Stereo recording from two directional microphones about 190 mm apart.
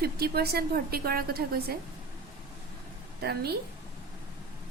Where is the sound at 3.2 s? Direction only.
55° right (ahead or behind).